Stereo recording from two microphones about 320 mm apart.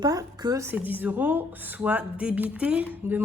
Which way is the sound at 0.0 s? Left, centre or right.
Centre.